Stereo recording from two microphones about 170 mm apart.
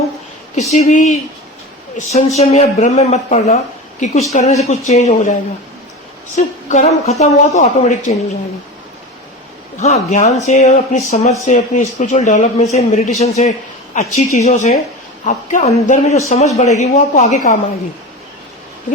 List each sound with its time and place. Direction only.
0.7 s speech: 40° left (ahead or behind)
9.7 s speech: 45° left (ahead or behind)